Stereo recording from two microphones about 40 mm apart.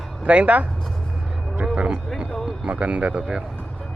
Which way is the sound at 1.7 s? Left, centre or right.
Right.